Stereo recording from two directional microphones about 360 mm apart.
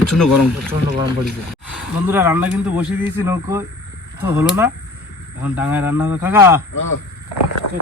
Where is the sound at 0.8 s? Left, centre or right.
Centre.